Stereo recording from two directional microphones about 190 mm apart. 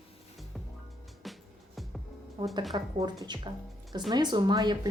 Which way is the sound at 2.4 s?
25° right (ahead or behind).